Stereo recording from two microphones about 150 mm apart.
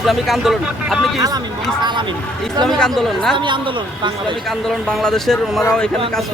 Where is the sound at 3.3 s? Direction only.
35° right (ahead or behind).